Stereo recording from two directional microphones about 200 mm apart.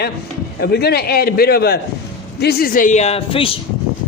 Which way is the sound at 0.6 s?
55° left (ahead or behind).